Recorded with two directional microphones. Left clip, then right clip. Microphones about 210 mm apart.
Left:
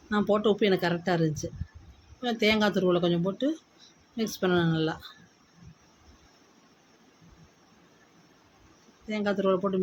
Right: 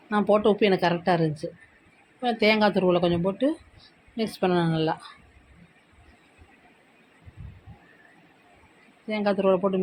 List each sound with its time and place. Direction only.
0.1 s speech: centre (ahead or behind)
9.0 s speech: centre (ahead or behind)